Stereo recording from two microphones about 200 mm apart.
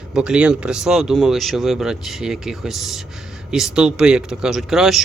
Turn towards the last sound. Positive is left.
turn(degrees=0)  # may be behind; listen again after turning